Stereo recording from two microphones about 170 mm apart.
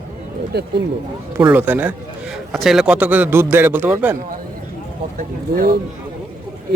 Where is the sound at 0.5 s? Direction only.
75° right (ahead or behind).